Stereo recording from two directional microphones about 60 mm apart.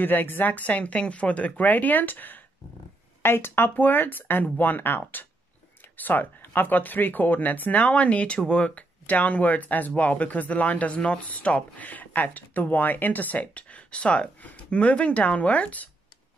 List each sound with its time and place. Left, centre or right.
0.0 s speech: left